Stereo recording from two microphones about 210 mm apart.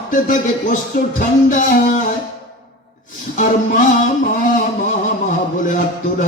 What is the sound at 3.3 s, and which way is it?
Speech, 40° left (ahead or behind).